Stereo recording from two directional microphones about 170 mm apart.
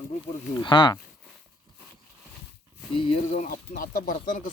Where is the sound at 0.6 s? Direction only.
30° left (ahead or behind).